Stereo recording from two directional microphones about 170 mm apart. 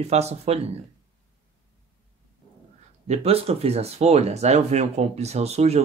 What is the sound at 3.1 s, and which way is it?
Speech, 35° right (ahead or behind).